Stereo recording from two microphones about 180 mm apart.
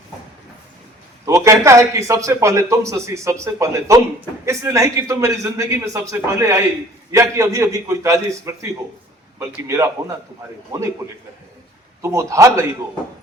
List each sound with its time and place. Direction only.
1.2 s a man's voice: 15° right (ahead or behind)
12.0 s a man's voice: 15° right (ahead or behind)